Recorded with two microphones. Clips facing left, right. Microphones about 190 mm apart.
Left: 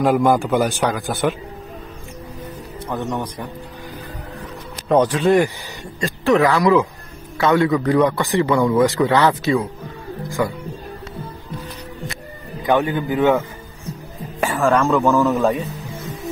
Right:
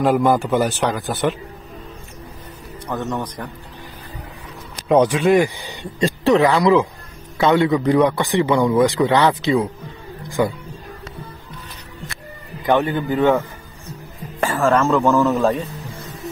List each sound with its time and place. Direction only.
0.0 s a man's voice: centre (ahead or behind)
2.9 s a man's voice: 15° left (ahead or behind)
4.8 s speech: 10° right (ahead or behind)
5.9 s a man's voice: 30° right (ahead or behind)
12.6 s a man's voice: 5° left (ahead or behind)
14.4 s a man's voice: centre (ahead or behind)
15.5 s music: centre (ahead or behind)